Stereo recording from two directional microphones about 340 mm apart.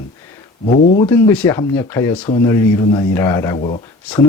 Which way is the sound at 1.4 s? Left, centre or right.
Centre.